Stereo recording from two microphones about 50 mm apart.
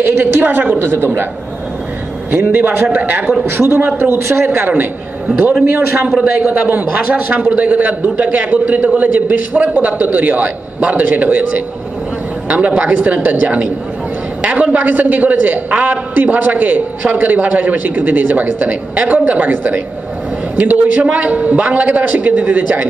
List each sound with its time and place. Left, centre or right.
0.0 s a woman's voice: right
2.5 s a woman's voice: right
3.4 s a woman's voice: right
4.6 s a woman's voice: right
5.9 s a man's voice: centre
6.4 s a woman's voice: right